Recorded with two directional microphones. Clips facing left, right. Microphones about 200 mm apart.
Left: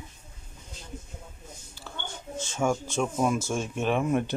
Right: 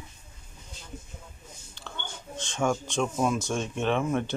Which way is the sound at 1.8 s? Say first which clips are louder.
Left 1 dB; 5° left (ahead or behind).